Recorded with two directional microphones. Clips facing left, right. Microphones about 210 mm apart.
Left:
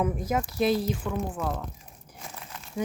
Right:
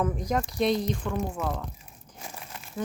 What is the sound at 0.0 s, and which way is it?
Speech, 5° left (ahead or behind).